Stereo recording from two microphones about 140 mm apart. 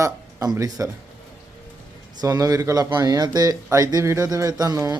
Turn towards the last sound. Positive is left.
turn(degrees=-25)  # may be behind; listen again after turning